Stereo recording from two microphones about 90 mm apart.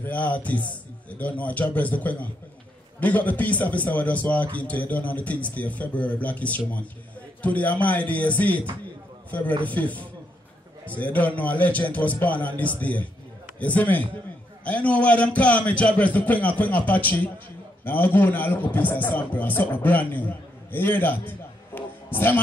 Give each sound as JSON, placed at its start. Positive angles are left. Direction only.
{"t": 0.0, "sound": "a man's voice", "side_deg": 15}
{"t": 9.7, "sound": "a man's voice", "side_deg": 15}